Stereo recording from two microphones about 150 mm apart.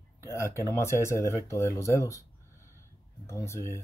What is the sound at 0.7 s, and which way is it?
Speech, 20° left (ahead or behind).